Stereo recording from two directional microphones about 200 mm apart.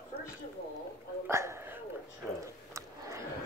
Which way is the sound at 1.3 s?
15° right (ahead or behind).